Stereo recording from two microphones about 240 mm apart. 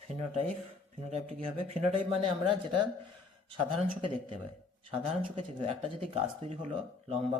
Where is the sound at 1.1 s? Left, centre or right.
Right.